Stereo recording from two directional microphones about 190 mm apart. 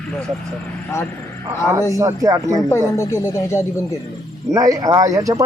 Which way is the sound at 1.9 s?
15° right (ahead or behind).